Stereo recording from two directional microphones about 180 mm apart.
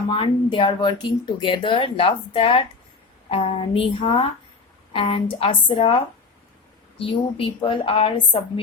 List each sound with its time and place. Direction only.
0.1 s a woman's voice: 30° left (ahead or behind)
7.0 s a woman's voice: 30° left (ahead or behind)